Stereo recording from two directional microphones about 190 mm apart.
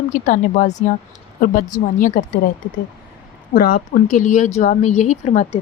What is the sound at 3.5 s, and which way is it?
Speech, 50° left (ahead or behind).